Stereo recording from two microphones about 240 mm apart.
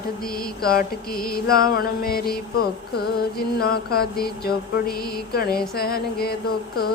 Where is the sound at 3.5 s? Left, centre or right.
Left.